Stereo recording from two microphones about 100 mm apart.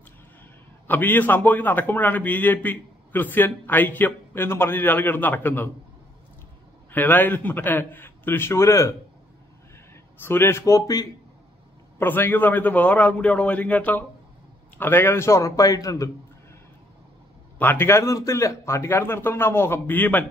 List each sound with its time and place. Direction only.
0.8 s a man's voice: 20° left (ahead or behind)
6.9 s a man's voice: 20° left (ahead or behind)
10.2 s a man's voice: 25° left (ahead or behind)
12.0 s a man's voice: 20° left (ahead or behind); by 16.1 s 35° left (ahead or behind)
17.6 s a man's voice: 20° left (ahead or behind)